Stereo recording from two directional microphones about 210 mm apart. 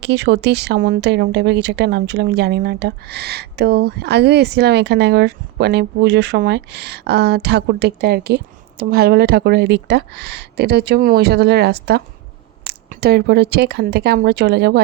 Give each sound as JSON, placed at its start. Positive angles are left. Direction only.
{"t": 0.0, "sound": "speech", "side_deg": -55}